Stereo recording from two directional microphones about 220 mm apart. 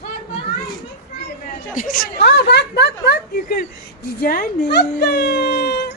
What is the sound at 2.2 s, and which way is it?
Speech, 50° left (ahead or behind).